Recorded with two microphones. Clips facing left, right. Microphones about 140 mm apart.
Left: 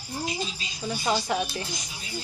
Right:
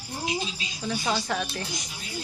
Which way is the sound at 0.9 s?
15° left (ahead or behind).